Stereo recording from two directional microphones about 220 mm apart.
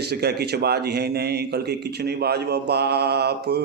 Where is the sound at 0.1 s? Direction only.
50° right (ahead or behind).